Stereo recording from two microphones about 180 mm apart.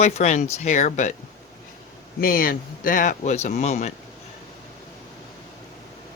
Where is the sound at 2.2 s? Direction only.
50° left (ahead or behind).